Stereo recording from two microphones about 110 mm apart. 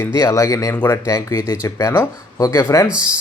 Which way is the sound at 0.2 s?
30° left (ahead or behind).